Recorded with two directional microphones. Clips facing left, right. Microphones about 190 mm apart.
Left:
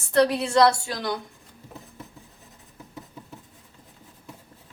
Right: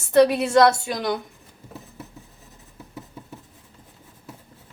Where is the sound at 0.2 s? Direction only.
5° right (ahead or behind).